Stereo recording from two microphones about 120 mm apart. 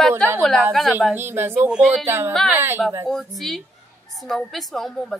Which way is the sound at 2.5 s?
15° right (ahead or behind).